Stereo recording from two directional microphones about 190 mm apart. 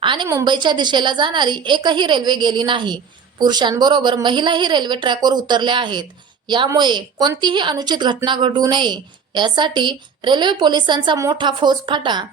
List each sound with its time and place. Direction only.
0.0 s a woman's voice: 25° right (ahead or behind)